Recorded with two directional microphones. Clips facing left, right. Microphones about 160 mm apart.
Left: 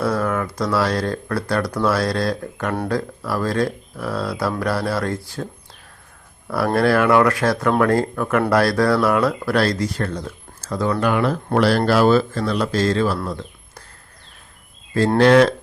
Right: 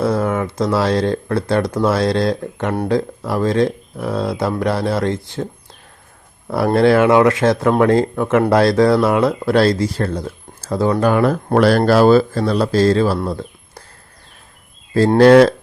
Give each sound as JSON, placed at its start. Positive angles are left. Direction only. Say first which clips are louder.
{"t": 0.0, "sound": "speech", "louder": "right 3 dB", "side_deg": -25}
{"t": 6.7, "sound": "speech", "louder": "right 4 dB", "side_deg": -25}
{"t": 11.0, "sound": "speech", "louder": "right 4 dB", "side_deg": -45}
{"t": 11.9, "sound": "speech", "louder": "right 4 dB", "side_deg": -40}
{"t": 15.2, "sound": "speech", "louder": "right 5 dB", "side_deg": -35}